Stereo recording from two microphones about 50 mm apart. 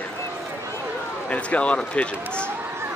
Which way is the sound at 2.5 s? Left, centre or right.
Right.